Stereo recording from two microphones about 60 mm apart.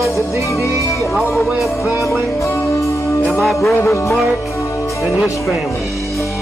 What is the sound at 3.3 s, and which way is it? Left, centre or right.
Music, centre.